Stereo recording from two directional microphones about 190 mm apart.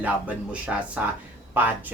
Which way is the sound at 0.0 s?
5° right (ahead or behind).